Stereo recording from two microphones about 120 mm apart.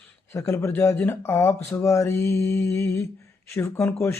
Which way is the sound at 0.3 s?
20° left (ahead or behind).